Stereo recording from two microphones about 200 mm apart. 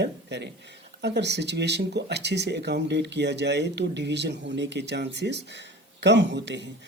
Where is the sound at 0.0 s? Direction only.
60° right (ahead or behind).